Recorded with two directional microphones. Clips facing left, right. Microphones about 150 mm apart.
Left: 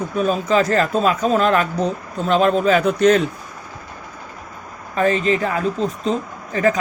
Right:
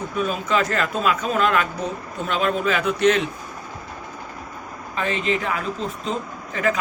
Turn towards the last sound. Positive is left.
turn(degrees=40)  # may be behind; listen again after turning